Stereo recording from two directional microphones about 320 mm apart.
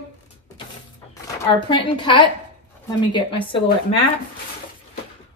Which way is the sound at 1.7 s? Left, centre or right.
Centre.